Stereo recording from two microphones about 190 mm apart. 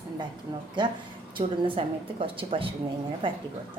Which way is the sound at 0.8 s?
25° right (ahead or behind).